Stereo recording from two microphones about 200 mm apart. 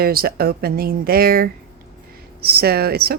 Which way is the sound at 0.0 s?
50° right (ahead or behind).